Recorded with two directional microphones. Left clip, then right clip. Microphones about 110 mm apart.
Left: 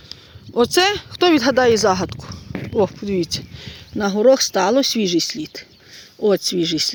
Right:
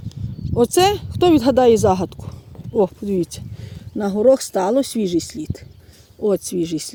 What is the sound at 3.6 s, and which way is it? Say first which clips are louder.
Speech: right 3 dB; 25° right (ahead or behind).